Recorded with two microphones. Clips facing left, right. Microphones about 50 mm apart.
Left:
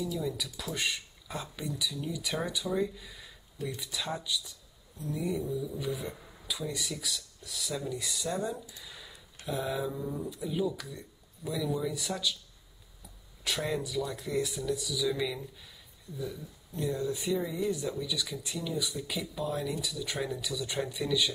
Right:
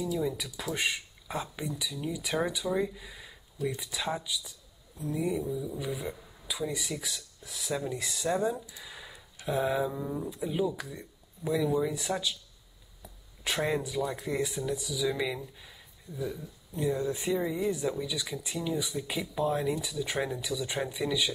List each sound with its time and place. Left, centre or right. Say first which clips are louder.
0.2 s speech: right 3 dB; right
13.4 s speech: right 3 dB; right
16.7 s speech: right 2 dB; centre